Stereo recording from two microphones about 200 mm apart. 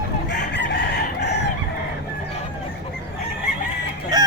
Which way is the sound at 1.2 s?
60° left (ahead or behind).